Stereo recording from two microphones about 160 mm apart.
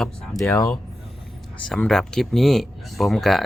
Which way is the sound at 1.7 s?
Centre (ahead or behind).